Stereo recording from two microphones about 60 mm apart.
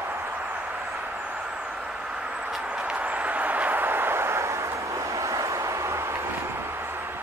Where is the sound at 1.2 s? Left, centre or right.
Centre; by 7.2 s right.